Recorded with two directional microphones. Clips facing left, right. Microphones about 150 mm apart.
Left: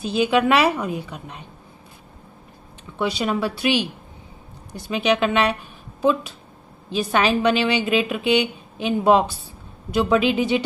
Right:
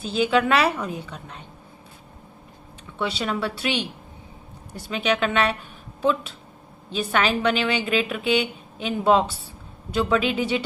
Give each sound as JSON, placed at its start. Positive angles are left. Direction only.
{"t": 0.0, "sound": "a woman's voice", "side_deg": 15}
{"t": 3.0, "sound": "a woman's voice", "side_deg": 15}
{"t": 4.9, "sound": "a woman's voice", "side_deg": 15}
{"t": 7.1, "sound": "a woman's voice", "side_deg": 15}